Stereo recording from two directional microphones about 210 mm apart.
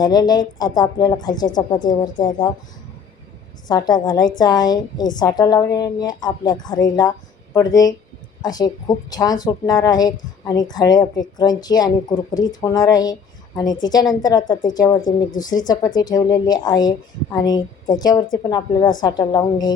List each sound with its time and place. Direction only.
0.0 s speech: 20° left (ahead or behind)
3.7 s speech: 20° left (ahead or behind)